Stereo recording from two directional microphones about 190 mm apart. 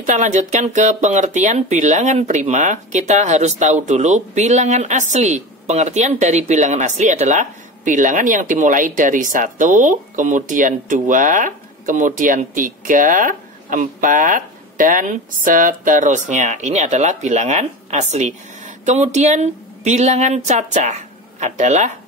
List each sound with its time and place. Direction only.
0.0 s speech: 40° right (ahead or behind)